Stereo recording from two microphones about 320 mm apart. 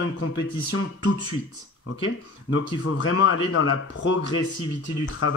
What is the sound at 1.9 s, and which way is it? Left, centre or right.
Speech, left.